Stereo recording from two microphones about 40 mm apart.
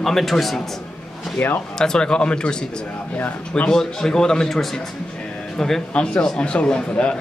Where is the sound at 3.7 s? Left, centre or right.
Centre.